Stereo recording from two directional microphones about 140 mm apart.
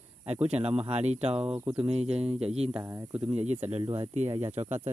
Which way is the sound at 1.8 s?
45° right (ahead or behind).